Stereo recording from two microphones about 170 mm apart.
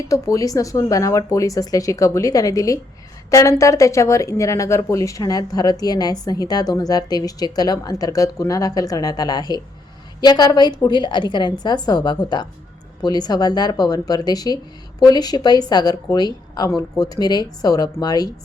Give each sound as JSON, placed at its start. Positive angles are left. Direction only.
{"t": 0.1, "sound": "speech", "side_deg": 20}